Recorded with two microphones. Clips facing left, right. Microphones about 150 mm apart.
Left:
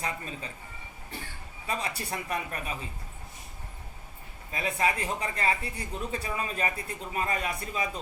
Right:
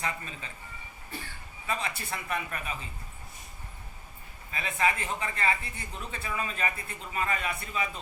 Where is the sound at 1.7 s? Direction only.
35° left (ahead or behind).